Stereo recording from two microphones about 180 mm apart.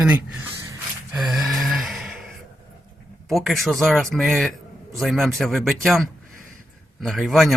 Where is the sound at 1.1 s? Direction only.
Centre (ahead or behind).